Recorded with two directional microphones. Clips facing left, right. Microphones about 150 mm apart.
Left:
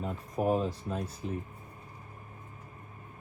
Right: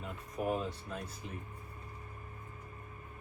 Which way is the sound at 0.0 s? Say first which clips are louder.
Left 6 dB; 35° left (ahead or behind).